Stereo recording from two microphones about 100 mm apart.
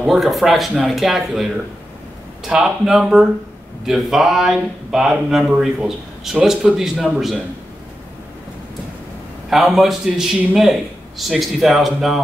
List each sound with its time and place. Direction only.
0.0 s speech: centre (ahead or behind)
9.5 s speech: 5° right (ahead or behind)